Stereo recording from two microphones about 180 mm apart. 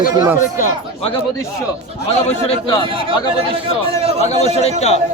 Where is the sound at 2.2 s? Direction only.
35° left (ahead or behind).